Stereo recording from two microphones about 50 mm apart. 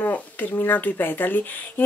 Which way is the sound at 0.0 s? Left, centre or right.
Left.